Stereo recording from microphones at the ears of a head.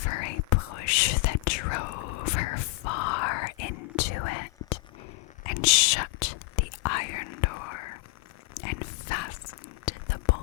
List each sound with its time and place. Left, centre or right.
0.0 s whispering: left